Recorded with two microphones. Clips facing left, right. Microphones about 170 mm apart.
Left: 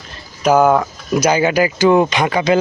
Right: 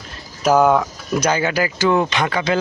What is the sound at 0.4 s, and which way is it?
Speech, centre (ahead or behind).